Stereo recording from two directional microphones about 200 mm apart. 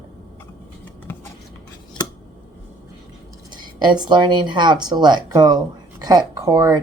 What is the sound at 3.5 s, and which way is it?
Speech, 20° right (ahead or behind).